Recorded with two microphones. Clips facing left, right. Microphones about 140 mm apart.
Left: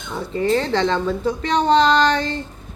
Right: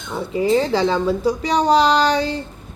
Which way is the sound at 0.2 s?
5° right (ahead or behind).